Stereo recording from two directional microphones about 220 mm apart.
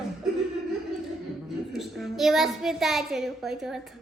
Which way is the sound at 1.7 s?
Centre (ahead or behind).